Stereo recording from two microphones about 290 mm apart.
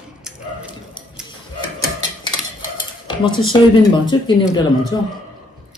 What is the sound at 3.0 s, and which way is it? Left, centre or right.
Speech, centre.